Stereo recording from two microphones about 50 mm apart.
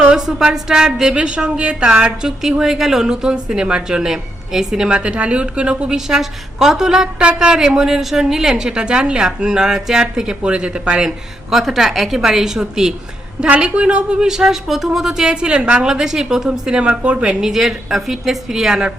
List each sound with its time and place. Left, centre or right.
0.2 s a woman's voice: centre
11.5 s a woman's voice: centre
13.5 s a woman's voice: right
17.4 s a woman's voice: centre